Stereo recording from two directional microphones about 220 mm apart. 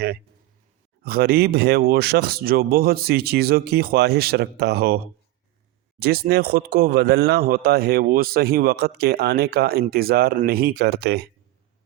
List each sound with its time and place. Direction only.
1.0 s speech: 45° right (ahead or behind)
6.0 s speech: 45° right (ahead or behind)